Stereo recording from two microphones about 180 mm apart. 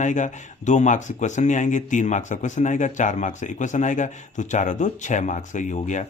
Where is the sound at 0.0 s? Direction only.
45° left (ahead or behind).